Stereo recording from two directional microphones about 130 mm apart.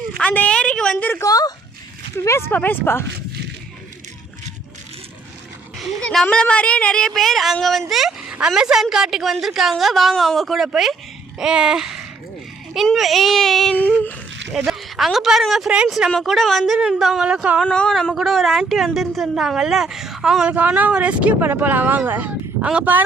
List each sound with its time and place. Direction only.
0.2 s a sound: 10° left (ahead or behind)
1.2 s speech: 30° left (ahead or behind)
5.8 s speech: centre (ahead or behind)
13.7 s speech: 10° left (ahead or behind)
14.5 s speech: centre (ahead or behind)
17.7 s speech: 5° left (ahead or behind); by 23.0 s 10° right (ahead or behind)